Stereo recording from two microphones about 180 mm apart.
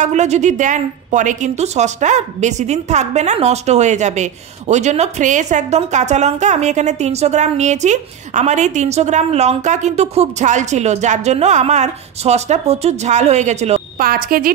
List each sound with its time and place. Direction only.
0.0 s a woman's voice: 40° right (ahead or behind)
13.9 s speech: 55° right (ahead or behind)